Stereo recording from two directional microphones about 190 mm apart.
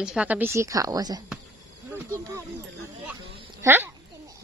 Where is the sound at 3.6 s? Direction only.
10° right (ahead or behind).